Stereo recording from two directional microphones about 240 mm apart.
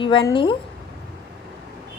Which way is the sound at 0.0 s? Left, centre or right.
Centre.